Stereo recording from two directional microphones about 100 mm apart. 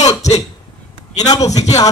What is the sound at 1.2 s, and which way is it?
Speech, 40° left (ahead or behind).